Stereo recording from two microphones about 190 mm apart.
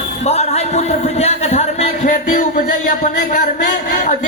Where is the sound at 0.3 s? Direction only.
35° left (ahead or behind).